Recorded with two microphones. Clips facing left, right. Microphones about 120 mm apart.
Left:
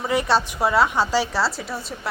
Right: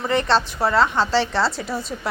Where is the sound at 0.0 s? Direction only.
10° left (ahead or behind).